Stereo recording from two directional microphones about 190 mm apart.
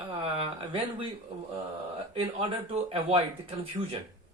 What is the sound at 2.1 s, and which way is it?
Speech, 30° right (ahead or behind).